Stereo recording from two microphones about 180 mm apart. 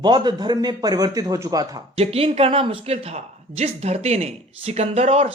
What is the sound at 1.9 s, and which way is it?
Speech, 35° right (ahead or behind).